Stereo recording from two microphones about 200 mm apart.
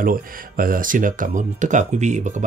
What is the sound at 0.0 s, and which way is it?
Speech, 45° right (ahead or behind).